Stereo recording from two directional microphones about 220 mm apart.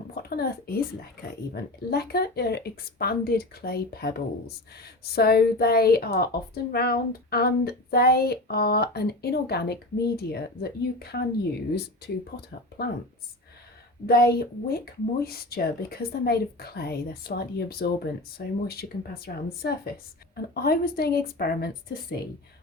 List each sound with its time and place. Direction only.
0.1 s speech: 45° left (ahead or behind)
14.1 s speech: 45° left (ahead or behind)